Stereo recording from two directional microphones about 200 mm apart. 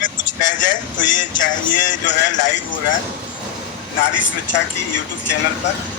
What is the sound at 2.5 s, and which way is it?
Speech, 70° left (ahead or behind).